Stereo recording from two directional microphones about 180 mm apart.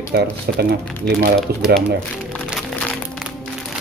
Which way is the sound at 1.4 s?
Centre (ahead or behind).